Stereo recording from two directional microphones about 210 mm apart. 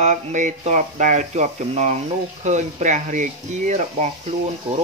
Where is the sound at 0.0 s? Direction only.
35° right (ahead or behind).